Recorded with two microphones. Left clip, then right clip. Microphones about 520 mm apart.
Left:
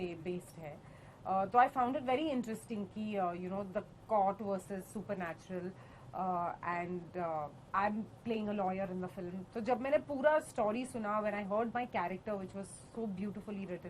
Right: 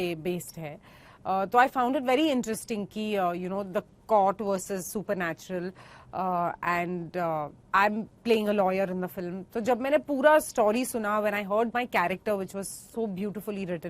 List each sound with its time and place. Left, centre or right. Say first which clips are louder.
0.1 s speech: right 10 dB; right